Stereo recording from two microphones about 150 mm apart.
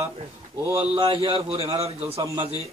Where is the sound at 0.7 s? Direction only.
35° right (ahead or behind).